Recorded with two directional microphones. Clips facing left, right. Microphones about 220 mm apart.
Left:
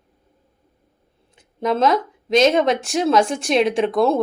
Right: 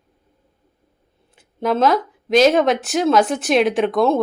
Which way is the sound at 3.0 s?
Centre (ahead or behind).